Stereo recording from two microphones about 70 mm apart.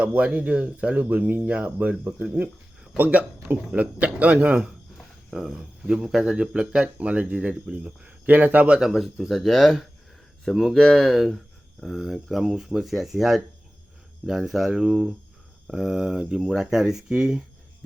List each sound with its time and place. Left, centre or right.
0.0 s speech: right
4.9 s speech: centre
8.9 s speech: centre